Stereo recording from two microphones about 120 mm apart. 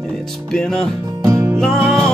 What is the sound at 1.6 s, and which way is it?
Music, 5° left (ahead or behind).